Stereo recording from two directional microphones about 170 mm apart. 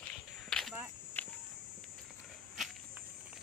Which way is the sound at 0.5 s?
Centre (ahead or behind).